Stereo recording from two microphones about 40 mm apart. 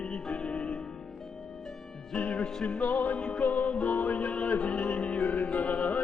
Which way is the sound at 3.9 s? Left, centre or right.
Left.